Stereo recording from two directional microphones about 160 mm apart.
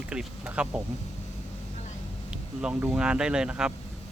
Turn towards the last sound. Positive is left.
turn(degrees=-5)  # may be behind; listen again after turning